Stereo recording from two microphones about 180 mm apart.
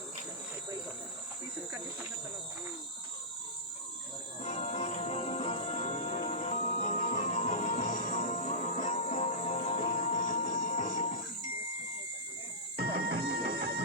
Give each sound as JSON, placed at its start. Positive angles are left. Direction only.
{"t": 4.4, "sound": "music", "side_deg": 40}
{"t": 12.8, "sound": "music", "side_deg": -65}